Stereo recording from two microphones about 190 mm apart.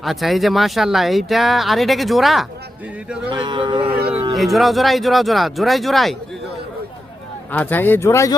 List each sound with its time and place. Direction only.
0.0 s speech: centre (ahead or behind)
3.2 s speech: 25° right (ahead or behind)
4.4 s speech: centre (ahead or behind)
7.5 s speech: 10° left (ahead or behind)